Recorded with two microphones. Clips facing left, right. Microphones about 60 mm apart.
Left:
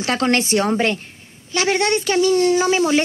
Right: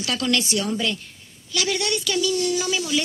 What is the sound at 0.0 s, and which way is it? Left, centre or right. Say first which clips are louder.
A woman's voice: left 5 dB; left.